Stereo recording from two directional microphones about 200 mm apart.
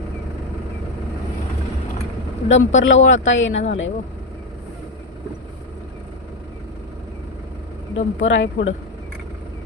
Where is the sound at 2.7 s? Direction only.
70° left (ahead or behind).